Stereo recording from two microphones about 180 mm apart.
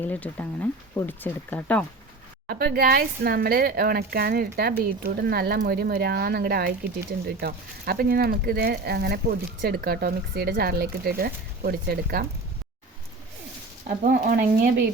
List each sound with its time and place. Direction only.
0.0 s speech: 10° left (ahead or behind)
2.5 s speech: 60° right (ahead or behind)
13.8 s speech: 50° right (ahead or behind)